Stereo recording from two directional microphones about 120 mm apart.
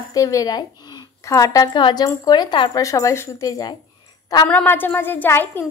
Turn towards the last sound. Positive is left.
turn(degrees=20)  # may be behind; listen again after turning